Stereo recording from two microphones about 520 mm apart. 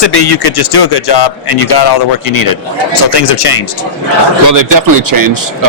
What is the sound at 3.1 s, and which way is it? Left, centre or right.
Speech, left.